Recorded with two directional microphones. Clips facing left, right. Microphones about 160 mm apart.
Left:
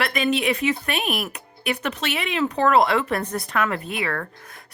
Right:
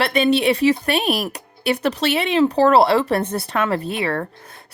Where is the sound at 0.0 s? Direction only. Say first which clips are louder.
Right 5 dB; 30° right (ahead or behind).